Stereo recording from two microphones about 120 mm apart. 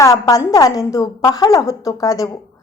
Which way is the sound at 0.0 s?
30° left (ahead or behind).